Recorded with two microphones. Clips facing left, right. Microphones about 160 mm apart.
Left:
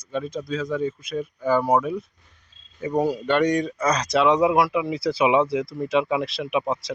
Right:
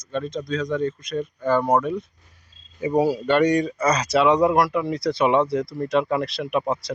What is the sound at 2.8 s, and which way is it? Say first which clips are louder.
Speech: right 3 dB; 10° right (ahead or behind).